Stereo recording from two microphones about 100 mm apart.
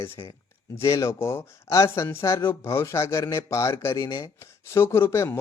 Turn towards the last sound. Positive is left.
turn(degrees=25)  # may be behind; listen again after turning